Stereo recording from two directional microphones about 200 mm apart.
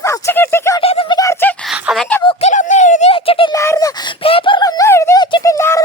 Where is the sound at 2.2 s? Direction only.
30° left (ahead or behind).